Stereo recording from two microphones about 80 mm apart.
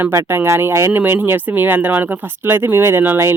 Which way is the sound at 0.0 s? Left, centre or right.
Right.